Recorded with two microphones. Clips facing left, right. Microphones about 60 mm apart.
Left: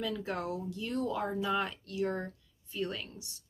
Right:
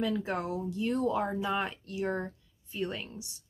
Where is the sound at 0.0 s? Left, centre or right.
Right.